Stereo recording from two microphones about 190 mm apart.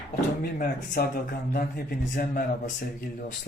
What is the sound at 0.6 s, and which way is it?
Speech, 50° left (ahead or behind).